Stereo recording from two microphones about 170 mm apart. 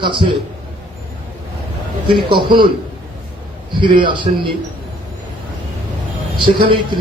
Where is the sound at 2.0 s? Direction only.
30° right (ahead or behind).